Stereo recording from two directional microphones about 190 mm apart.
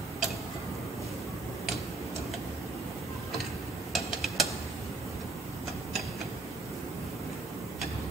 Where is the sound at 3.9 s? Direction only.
Centre (ahead or behind).